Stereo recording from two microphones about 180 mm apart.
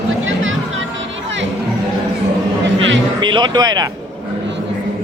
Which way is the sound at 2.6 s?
90° right.